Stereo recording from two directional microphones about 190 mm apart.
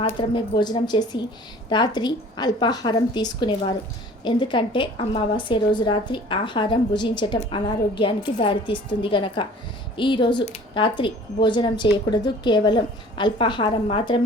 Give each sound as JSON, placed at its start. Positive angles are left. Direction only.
{"t": 0.0, "sound": "speech", "side_deg": 25}